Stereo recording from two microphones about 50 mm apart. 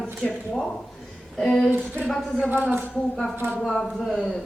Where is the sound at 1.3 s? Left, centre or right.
Centre.